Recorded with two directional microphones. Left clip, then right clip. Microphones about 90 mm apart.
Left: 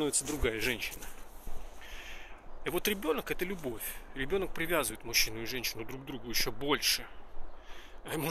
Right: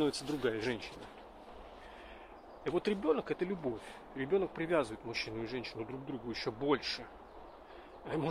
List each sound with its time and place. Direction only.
0.0 s speech: 5° left (ahead or behind)
2.6 s speech: 15° left (ahead or behind)